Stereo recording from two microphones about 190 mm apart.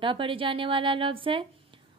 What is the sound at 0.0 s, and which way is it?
Mantra, 25° right (ahead or behind).